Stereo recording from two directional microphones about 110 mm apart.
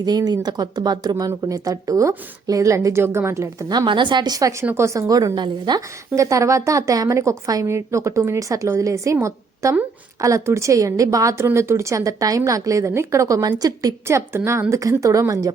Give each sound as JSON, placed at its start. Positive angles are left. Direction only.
{"t": 0.0, "sound": "a woman's voice", "side_deg": -40}
{"t": 1.1, "sound": "speech", "side_deg": -25}
{"t": 3.7, "sound": "a woman's voice", "side_deg": -40}
{"t": 6.1, "sound": "a woman's voice", "side_deg": -30}